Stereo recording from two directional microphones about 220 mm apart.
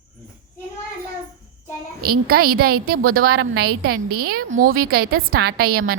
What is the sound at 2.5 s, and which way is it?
Speech, 45° right (ahead or behind).